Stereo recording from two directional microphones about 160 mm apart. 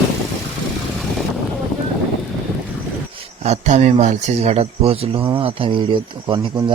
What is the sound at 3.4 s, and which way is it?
Speech, 45° right (ahead or behind).